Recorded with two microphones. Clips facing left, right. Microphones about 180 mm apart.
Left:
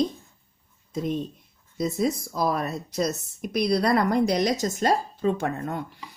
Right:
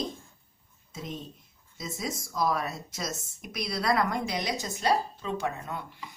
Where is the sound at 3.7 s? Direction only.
35° left (ahead or behind).